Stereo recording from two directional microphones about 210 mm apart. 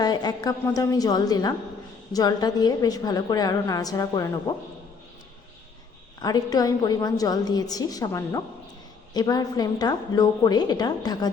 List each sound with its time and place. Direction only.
0.0 s a woman's voice: 20° left (ahead or behind)
6.2 s a woman's voice: 15° left (ahead or behind)